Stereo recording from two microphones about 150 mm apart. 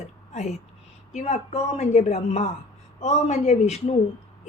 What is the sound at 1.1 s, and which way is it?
A woman's voice, 50° left (ahead or behind).